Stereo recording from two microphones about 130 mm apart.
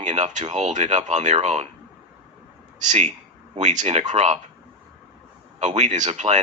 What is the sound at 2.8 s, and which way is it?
A man's voice, 65° right (ahead or behind).